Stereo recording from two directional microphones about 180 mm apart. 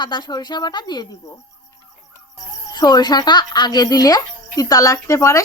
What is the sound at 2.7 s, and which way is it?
Speech, 20° left (ahead or behind).